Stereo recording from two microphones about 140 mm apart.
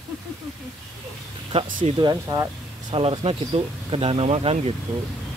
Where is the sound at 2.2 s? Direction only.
20° right (ahead or behind).